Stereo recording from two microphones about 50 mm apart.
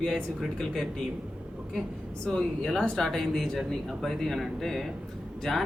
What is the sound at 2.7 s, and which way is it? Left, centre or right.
Speech, centre.